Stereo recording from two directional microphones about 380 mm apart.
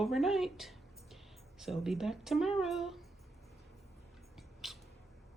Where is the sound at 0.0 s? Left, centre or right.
Centre.